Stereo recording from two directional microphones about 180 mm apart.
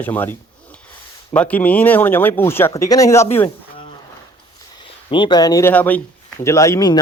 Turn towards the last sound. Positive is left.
turn(degrees=20)  # may be behind; listen again after turning